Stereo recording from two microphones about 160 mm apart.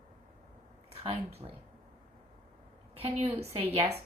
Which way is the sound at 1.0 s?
40° right (ahead or behind).